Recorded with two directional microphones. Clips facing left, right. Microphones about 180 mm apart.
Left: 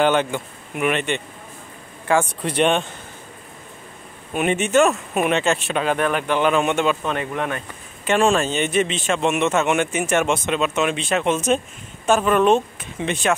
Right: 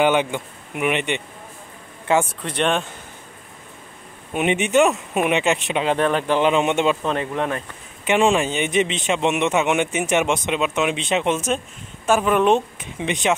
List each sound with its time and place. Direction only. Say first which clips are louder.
0.0 s a man's voice: even; 15° right (ahead or behind)
2.4 s speech: left 3 dB; 5° left (ahead or behind)
4.3 s speech: even; 20° right (ahead or behind)
8.0 s a man's voice: even; 15° right (ahead or behind)